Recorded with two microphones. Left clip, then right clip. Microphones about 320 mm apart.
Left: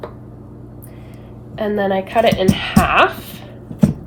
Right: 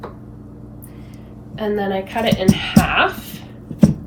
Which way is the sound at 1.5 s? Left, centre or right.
Left.